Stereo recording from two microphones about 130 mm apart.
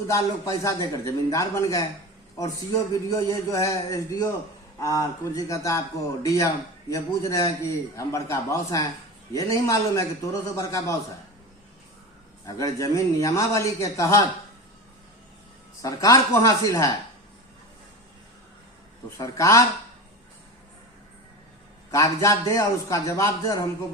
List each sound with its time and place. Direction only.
0.1 s a man's voice: 25° left (ahead or behind)
2.9 s a man's voice: 25° left (ahead or behind)
12.5 s a man's voice: 25° left (ahead or behind)
15.8 s a man's voice: 30° left (ahead or behind)
19.1 s a man's voice: 25° left (ahead or behind)
21.9 s a man's voice: 25° left (ahead or behind)